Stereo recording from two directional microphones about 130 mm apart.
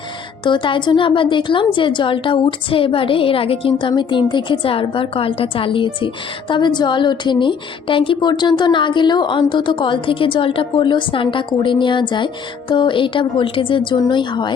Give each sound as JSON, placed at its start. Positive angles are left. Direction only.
{"t": 0.4, "sound": "a woman's voice", "side_deg": 40}